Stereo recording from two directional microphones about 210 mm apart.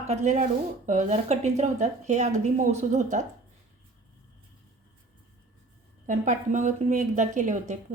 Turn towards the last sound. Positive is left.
turn(degrees=-35)  # may be behind; listen again after turning